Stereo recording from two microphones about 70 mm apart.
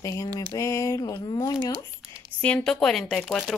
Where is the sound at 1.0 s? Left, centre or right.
Left.